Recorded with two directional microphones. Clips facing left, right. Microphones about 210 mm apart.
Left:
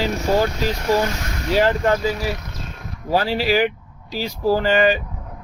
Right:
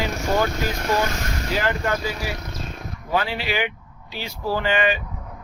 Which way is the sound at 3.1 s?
35° left (ahead or behind).